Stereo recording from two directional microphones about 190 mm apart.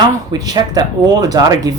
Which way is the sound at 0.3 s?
20° right (ahead or behind).